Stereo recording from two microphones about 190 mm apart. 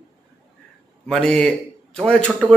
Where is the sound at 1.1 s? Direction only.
5° left (ahead or behind).